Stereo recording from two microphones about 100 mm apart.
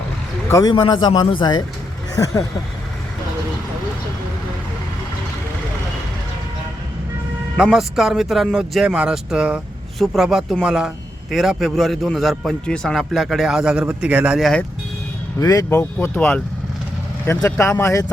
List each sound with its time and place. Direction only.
0.6 s a man's voice: 45° left (ahead or behind)
2.1 s speech: 35° left (ahead or behind)
7.5 s a man's voice: 5° right (ahead or behind)
14.3 s a man's voice: centre (ahead or behind)
15.4 s speech: 35° left (ahead or behind)